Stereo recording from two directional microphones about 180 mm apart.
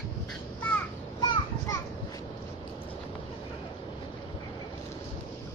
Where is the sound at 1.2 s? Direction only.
20° left (ahead or behind).